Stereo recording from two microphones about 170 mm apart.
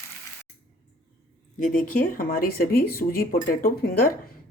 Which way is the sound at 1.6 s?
55° left (ahead or behind).